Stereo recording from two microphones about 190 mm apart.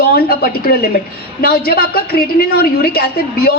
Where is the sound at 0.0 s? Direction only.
55° left (ahead or behind).